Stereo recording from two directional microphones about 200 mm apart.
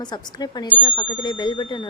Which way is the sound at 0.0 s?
20° left (ahead or behind).